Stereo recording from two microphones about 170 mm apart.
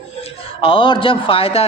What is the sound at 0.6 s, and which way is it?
A man's voice, 30° left (ahead or behind).